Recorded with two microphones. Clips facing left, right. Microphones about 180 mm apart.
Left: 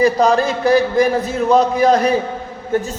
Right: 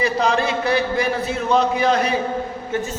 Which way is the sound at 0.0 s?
40° left (ahead or behind).